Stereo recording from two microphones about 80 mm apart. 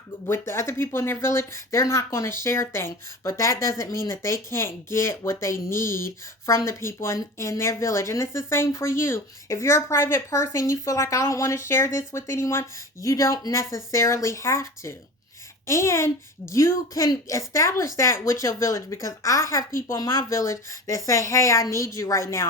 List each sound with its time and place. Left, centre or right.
0.3 s speech: left